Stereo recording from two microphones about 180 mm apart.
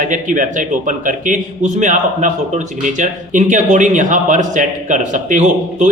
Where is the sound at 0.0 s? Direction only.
45° right (ahead or behind).